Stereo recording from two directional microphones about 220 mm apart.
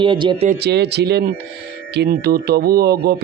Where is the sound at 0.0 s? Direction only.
20° right (ahead or behind).